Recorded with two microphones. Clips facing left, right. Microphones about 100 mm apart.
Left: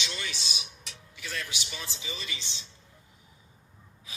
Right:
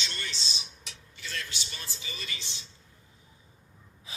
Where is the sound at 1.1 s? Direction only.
55° left (ahead or behind).